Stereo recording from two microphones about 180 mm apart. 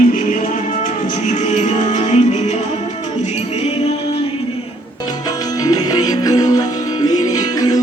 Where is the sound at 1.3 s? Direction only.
40° left (ahead or behind).